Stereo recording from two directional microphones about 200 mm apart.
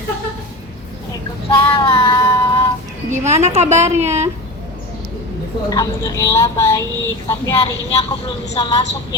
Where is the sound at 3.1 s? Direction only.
35° right (ahead or behind).